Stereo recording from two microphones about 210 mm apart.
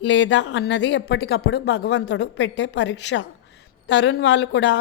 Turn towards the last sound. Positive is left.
turn(degrees=55)  # may be behind; listen again after turning